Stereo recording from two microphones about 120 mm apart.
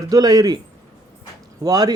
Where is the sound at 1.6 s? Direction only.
30° right (ahead or behind).